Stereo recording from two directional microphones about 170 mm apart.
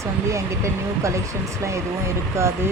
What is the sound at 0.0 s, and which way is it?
Speech, 15° right (ahead or behind).